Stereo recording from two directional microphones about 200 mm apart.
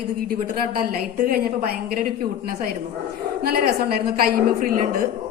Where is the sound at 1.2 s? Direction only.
50° right (ahead or behind).